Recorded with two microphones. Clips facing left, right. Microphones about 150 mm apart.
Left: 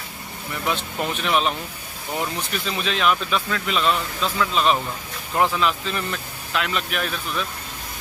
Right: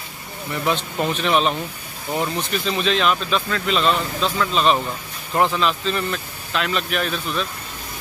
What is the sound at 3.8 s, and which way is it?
Speech, 25° right (ahead or behind).